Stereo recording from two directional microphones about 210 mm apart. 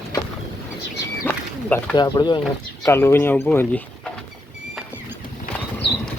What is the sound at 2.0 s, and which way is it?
Speech, 20° left (ahead or behind).